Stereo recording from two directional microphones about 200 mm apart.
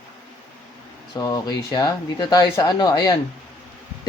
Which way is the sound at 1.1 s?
20° left (ahead or behind).